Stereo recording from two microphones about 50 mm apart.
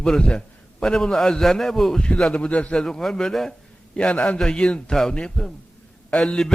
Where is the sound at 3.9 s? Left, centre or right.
Left.